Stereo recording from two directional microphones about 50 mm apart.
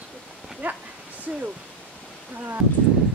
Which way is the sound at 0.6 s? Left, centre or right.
Right.